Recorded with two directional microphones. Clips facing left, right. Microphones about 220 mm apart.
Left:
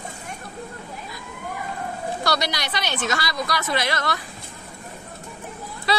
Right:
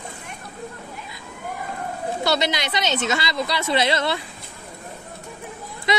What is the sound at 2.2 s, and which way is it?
A woman's voice, 25° right (ahead or behind).